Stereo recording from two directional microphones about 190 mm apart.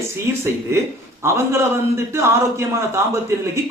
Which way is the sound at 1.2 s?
15° right (ahead or behind).